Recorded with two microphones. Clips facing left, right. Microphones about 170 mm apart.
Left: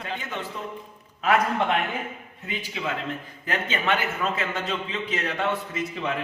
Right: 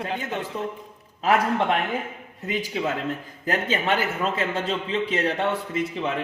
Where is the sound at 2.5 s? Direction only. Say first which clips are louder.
Right 5 dB; 40° right (ahead or behind).